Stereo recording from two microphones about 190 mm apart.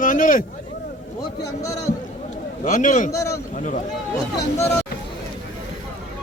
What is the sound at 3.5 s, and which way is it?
Speech, 40° left (ahead or behind).